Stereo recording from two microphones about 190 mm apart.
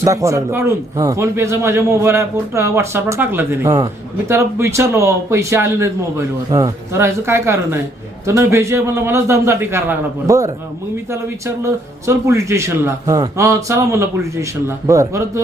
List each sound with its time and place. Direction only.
0.0 s speech: 15° right (ahead or behind)